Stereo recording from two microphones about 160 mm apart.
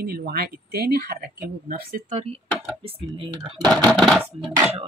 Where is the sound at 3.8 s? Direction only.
5° left (ahead or behind).